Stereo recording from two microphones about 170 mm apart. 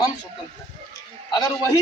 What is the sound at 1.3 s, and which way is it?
Speech, 20° left (ahead or behind).